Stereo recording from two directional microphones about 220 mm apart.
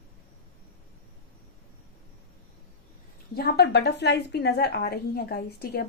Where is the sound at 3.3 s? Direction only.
45° left (ahead or behind).